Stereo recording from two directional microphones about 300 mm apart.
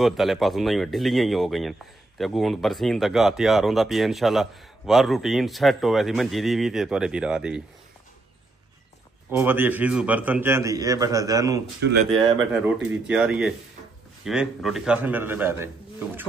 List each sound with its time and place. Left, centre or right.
0.0 s speech: centre
9.3 s a man's voice: centre
11.8 s speech: right
12.1 s a man's voice: centre
12.5 s speech: centre